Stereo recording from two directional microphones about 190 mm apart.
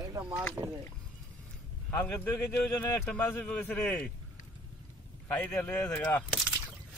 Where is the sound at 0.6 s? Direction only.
20° right (ahead or behind).